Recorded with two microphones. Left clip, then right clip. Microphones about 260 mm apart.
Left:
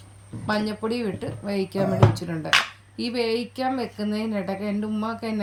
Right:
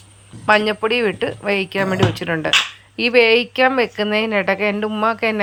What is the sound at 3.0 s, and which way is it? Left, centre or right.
Speech, right.